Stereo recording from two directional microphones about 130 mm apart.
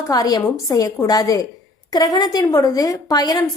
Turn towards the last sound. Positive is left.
turn(degrees=30)  # may be behind; listen again after turning